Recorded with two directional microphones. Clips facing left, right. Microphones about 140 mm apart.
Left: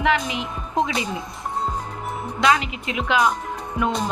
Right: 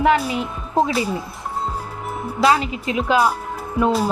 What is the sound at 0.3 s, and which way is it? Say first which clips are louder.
Speech: right 4 dB; 35° right (ahead or behind).